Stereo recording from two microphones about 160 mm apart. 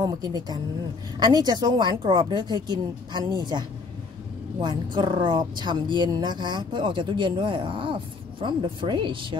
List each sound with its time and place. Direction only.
0.0 s a woman's voice: 25° right (ahead or behind)